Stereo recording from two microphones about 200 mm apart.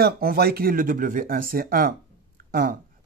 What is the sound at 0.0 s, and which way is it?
Speech, 50° right (ahead or behind).